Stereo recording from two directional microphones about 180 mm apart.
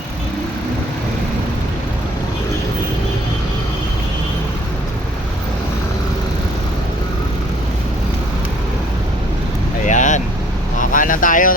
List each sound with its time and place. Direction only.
9.8 s vehicle: 45° left (ahead or behind)